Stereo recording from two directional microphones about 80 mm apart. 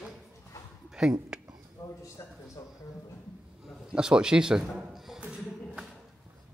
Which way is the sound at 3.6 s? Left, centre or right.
Centre.